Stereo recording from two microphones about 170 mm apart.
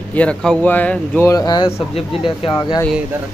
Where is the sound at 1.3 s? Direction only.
20° left (ahead or behind).